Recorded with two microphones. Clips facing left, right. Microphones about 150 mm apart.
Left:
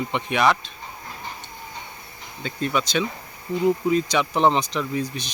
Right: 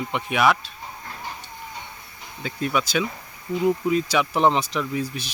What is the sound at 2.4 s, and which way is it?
A man's voice, 5° right (ahead or behind).